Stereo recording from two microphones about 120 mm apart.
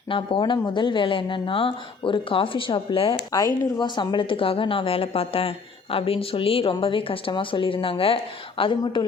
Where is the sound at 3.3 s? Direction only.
35° left (ahead or behind).